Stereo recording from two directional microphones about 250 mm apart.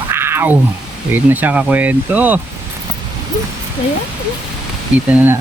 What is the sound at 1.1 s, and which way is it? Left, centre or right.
Speech, centre.